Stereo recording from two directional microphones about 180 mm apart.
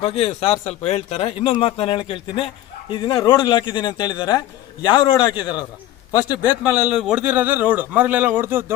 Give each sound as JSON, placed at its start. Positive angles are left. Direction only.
{"t": 0.0, "sound": "a man's voice", "side_deg": 35}
{"t": 6.6, "sound": "a man's voice", "side_deg": -5}